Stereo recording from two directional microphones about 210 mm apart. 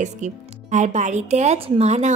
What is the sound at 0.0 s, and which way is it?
Speech, 35° right (ahead or behind).